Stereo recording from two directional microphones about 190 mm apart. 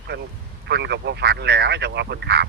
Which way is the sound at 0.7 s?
60° right (ahead or behind).